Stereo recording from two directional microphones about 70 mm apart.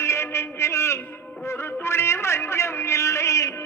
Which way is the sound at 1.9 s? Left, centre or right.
Left.